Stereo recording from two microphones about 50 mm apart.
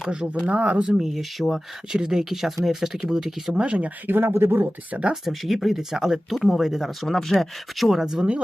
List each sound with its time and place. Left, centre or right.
0.4 s speech: right
0.9 s speech: centre
1.9 s speech: centre
3.6 s speech: right
4.0 s speech: right
4.3 s speech: right
4.9 s speech: right
5.2 s speech: centre